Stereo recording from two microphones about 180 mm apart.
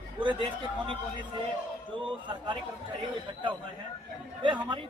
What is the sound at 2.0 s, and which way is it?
Speech, 25° right (ahead or behind).